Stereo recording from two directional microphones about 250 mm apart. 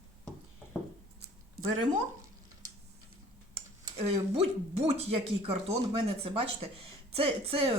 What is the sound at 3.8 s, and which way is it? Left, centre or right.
Speech, right.